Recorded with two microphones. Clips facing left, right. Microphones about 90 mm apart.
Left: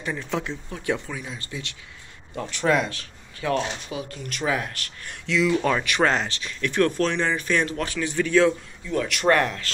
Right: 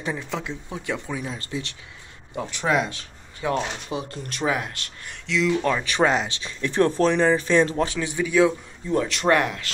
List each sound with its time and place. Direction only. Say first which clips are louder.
0.1 s speech: left 2 dB; 5° right (ahead or behind)
1.0 s speech: right 4 dB; 20° right (ahead or behind)
2.3 s speech: left 1 dB; 15° right (ahead or behind)
4.1 s speech: right 2 dB; 35° right (ahead or behind)
4.5 s speech: even; 15° right (ahead or behind)
5.2 s speech: even; centre (ahead or behind)
6.0 s speech: right 2 dB; 10° right (ahead or behind)
6.3 s speech: right 1 dB; 25° right (ahead or behind); by 8.5 s 10° right (ahead or behind)
8.8 s speech: right 3 dB; 25° right (ahead or behind)
9.2 s speech: left 2 dB; 15° right (ahead or behind)